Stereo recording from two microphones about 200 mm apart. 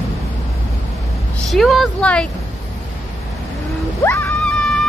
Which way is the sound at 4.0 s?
10° left (ahead or behind).